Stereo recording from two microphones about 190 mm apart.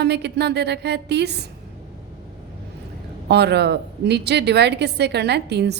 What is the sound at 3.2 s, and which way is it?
A woman's voice, 60° right (ahead or behind).